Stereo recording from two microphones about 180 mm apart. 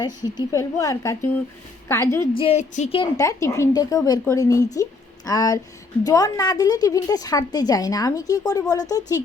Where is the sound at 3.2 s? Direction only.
15° left (ahead or behind).